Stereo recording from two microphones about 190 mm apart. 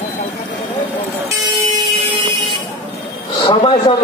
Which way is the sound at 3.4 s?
30° left (ahead or behind).